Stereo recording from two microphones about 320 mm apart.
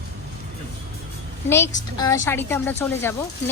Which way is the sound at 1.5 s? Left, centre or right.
Centre.